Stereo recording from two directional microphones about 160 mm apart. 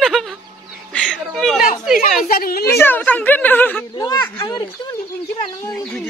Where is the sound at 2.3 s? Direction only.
70° left (ahead or behind).